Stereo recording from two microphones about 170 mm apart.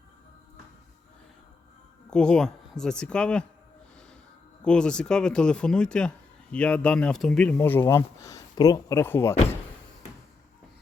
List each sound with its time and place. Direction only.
2.0 s speech: 5° left (ahead or behind)
4.6 s speech: 5° left (ahead or behind)